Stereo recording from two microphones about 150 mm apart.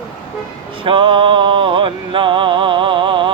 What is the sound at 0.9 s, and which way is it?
Music, 35° right (ahead or behind).